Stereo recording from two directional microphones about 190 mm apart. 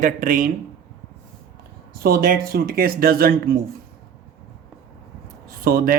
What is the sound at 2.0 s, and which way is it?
Speech, 50° right (ahead or behind).